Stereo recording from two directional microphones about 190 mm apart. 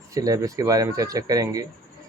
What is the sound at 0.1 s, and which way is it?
Speech, 20° right (ahead or behind).